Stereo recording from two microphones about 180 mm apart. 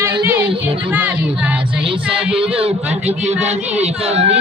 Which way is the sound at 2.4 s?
35° right (ahead or behind).